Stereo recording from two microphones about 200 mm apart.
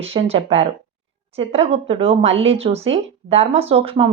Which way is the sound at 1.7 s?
30° right (ahead or behind).